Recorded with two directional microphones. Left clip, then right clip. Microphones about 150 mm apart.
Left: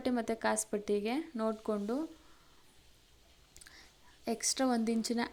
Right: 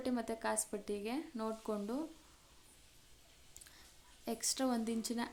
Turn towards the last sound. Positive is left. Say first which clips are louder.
# left 6 dB
turn(degrees=20)  # may be behind; listen again after turning